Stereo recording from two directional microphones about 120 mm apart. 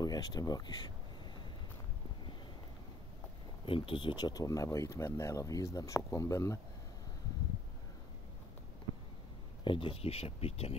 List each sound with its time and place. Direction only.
0.0 s speech: 35° left (ahead or behind)
3.6 s speech: 50° left (ahead or behind); by 6.6 s 25° left (ahead or behind)
9.7 s speech: 50° left (ahead or behind)